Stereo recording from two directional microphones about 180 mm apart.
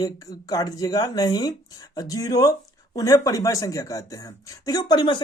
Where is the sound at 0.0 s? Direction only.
20° left (ahead or behind).